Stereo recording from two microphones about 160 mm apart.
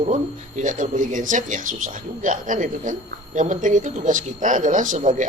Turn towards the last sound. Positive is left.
turn(degrees=-50)  # may be behind; listen again after turning